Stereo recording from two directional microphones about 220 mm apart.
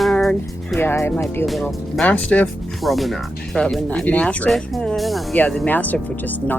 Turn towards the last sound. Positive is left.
turn(degrees=10)  # may be behind; listen again after turning